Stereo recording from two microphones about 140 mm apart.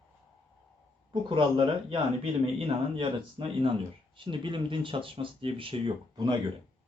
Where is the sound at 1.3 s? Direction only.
35° right (ahead or behind).